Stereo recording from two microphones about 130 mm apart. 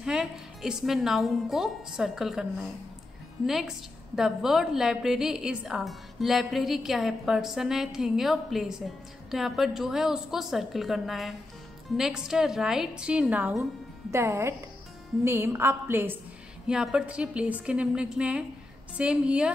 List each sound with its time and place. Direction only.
0.0 s a woman's voice: 5° right (ahead or behind)
3.4 s a woman's voice: centre (ahead or behind)
14.1 s a woman's voice: 20° right (ahead or behind)
16.6 s a woman's voice: 5° right (ahead or behind)